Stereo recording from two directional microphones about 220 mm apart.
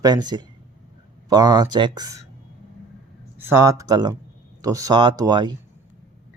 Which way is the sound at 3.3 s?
10° right (ahead or behind).